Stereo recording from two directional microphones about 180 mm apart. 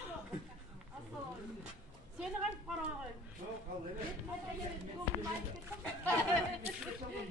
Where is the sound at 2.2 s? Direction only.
5° right (ahead or behind).